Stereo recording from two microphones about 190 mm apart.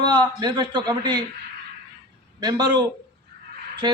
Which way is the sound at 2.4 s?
20° right (ahead or behind).